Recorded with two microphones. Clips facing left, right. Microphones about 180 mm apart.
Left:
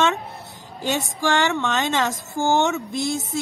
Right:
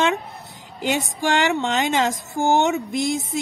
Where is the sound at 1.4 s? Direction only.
20° right (ahead or behind).